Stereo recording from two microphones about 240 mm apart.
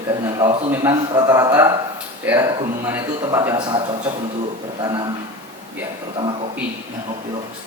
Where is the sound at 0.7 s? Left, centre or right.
Centre.